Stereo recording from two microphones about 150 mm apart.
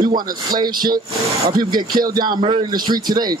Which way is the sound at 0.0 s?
30° right (ahead or behind).